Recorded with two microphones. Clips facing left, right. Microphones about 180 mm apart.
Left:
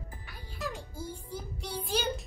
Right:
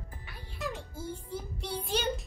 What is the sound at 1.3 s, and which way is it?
Child singing, centre (ahead or behind).